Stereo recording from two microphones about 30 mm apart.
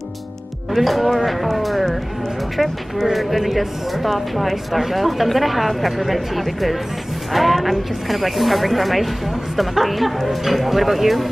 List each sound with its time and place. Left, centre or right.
0.7 s speech: centre